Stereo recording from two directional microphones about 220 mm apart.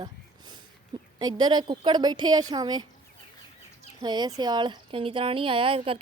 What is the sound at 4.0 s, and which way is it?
Speech, 20° right (ahead or behind).